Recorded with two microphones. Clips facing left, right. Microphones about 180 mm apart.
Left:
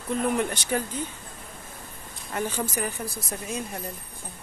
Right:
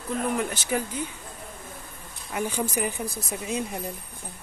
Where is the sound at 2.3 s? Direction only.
10° right (ahead or behind).